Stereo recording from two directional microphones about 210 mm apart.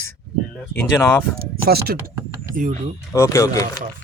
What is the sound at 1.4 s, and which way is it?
Speech, 45° right (ahead or behind).